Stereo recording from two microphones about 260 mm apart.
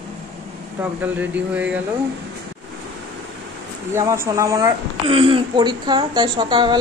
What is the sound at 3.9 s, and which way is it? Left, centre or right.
Speech, centre.